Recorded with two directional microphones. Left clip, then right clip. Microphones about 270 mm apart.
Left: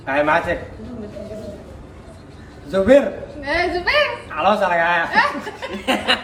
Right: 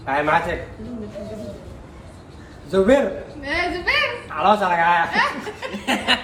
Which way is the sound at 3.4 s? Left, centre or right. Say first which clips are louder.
Left 2 dB; centre.